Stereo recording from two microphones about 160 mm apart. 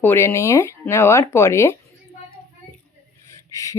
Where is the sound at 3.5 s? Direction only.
20° left (ahead or behind).